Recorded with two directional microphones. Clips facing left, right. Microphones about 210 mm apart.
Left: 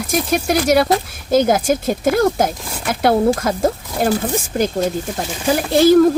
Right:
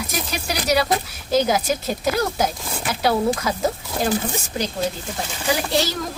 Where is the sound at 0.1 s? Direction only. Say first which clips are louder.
Left 10 dB; 50° left (ahead or behind).